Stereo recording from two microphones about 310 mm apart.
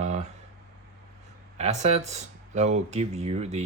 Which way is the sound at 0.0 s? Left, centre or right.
Right.